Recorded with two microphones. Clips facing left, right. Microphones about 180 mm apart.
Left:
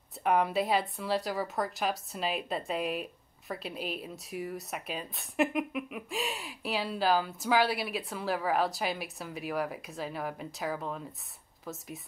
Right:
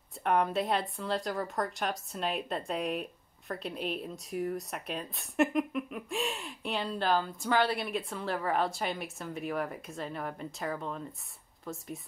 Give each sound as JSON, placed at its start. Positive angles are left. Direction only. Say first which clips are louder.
{"t": 0.2, "sound": "a woman's voice", "louder": "left 1 dB", "side_deg": 0}